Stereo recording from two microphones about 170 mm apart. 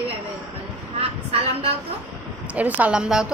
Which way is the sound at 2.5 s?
10° right (ahead or behind).